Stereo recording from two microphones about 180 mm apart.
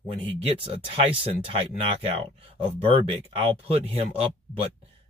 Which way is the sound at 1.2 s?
35° right (ahead or behind).